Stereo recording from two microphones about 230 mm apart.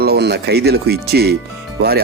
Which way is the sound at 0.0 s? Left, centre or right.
Right.